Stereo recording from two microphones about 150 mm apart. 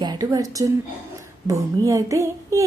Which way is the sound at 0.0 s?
25° right (ahead or behind).